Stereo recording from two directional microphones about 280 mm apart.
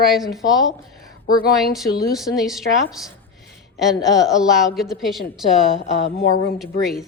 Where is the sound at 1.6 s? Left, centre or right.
Centre.